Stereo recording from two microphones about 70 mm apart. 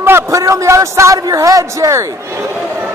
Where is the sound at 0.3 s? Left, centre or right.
Right.